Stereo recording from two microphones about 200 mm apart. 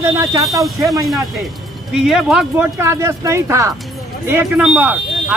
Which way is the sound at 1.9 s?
Centre (ahead or behind).